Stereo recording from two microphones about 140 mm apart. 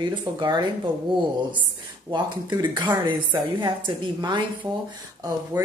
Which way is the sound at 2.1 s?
35° right (ahead or behind).